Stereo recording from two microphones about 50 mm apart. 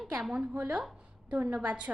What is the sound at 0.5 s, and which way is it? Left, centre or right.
A woman's voice, right.